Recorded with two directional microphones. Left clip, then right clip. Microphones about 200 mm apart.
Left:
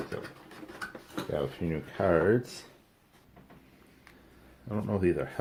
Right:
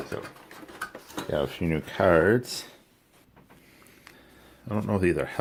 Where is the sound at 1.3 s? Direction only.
50° right (ahead or behind); by 2.6 s 35° right (ahead or behind).